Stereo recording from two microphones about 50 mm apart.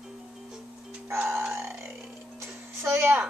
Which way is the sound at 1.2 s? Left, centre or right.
Right.